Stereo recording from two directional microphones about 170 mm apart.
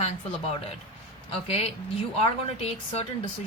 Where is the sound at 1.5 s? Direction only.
40° left (ahead or behind).